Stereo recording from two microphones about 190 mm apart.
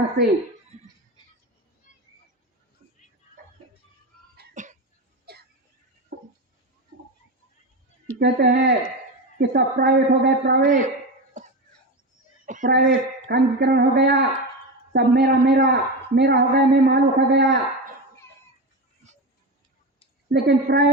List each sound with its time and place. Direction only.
1.9 s a sound: 40° left (ahead or behind)
4.4 s cough: 40° right (ahead or behind)
5.3 s a sound: 55° right (ahead or behind)
8.2 s speech: 55° right (ahead or behind)
9.4 s a man's voice: 60° right (ahead or behind)
10.6 s speech: 40° right (ahead or behind)
12.5 s a sound: 40° right (ahead or behind)
12.7 s a man's voice: 65° right (ahead or behind); by 14.4 s 50° right (ahead or behind)
14.9 s a man's voice: 60° right (ahead or behind)
20.3 s a man's voice: 60° right (ahead or behind)